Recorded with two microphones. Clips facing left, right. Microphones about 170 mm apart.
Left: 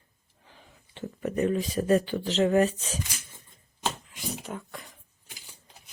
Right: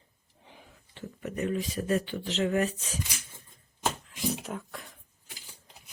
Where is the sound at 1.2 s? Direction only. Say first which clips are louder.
Left 5 dB; 35° left (ahead or behind).